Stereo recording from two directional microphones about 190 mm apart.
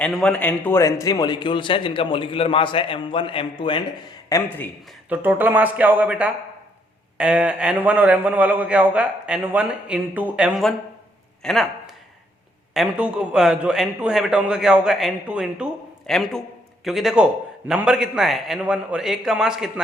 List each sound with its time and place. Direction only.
0.0 s a man's voice: 5° left (ahead or behind); by 3.8 s 25° left (ahead or behind)
4.3 s speech: 10° left (ahead or behind)
5.0 s a man's voice: 10° right (ahead or behind)
12.7 s a man's voice: 5° right (ahead or behind)